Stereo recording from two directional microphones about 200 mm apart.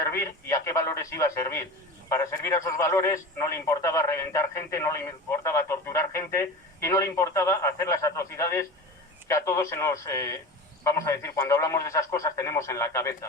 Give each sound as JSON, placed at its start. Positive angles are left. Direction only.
{"t": 0.0, "sound": "a man's voice", "side_deg": 15}